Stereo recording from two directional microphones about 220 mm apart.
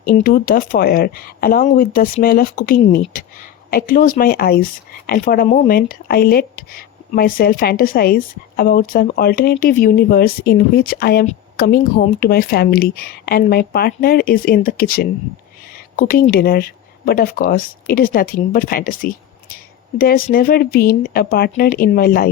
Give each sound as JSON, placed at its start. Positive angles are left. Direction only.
{"t": 0.0, "sound": "a woman's voice", "side_deg": 45}